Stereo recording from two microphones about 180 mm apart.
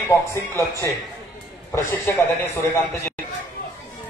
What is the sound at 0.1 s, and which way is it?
A man's voice, 15° left (ahead or behind).